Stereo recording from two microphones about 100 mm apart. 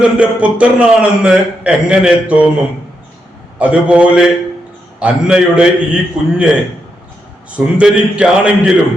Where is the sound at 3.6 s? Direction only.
10° right (ahead or behind).